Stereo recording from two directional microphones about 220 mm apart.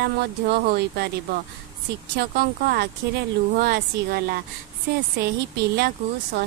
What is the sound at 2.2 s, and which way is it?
Speech, 45° right (ahead or behind).